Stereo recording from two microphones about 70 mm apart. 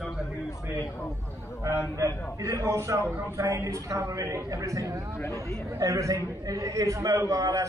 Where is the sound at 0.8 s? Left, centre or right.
Left.